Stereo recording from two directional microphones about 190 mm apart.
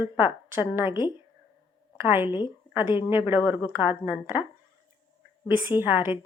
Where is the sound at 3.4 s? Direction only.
20° left (ahead or behind).